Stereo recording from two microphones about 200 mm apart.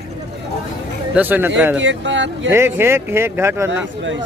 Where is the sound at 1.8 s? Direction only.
65° right (ahead or behind).